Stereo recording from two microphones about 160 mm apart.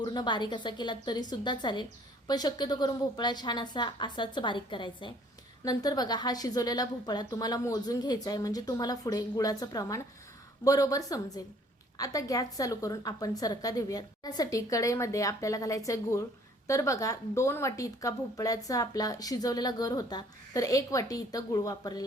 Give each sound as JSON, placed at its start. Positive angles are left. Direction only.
{"t": 0.0, "sound": "a woman's voice", "side_deg": 25}